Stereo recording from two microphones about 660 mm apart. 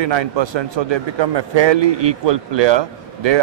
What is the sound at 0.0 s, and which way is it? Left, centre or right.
A man's voice, right.